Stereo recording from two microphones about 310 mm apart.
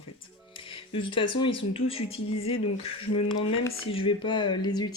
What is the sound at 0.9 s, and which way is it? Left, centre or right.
Speech, centre.